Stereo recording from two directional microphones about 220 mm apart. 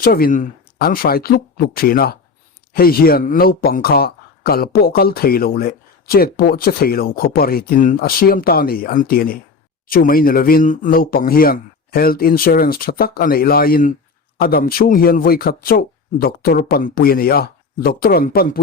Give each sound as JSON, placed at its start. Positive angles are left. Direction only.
{"t": 0.0, "sound": "speech", "side_deg": 45}